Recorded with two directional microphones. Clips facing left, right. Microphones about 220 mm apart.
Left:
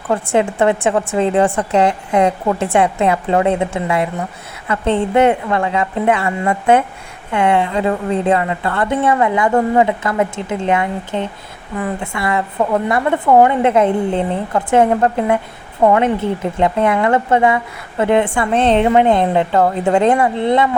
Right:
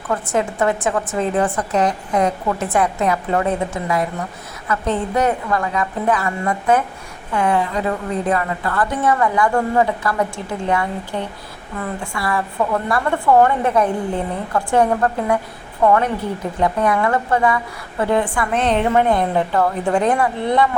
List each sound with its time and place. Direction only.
0.1 s a woman's voice: 30° left (ahead or behind)